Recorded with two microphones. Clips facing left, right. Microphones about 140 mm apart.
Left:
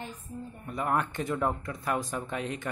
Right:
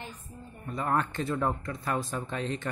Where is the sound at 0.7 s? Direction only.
10° left (ahead or behind).